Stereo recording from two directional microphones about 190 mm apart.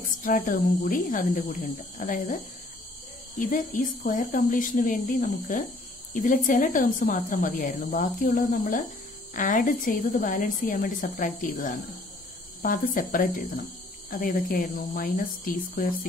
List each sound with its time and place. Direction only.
0.2 s a woman's voice: 45° left (ahead or behind)